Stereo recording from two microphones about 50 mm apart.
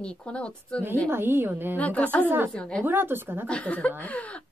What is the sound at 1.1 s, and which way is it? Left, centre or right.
Speech, right.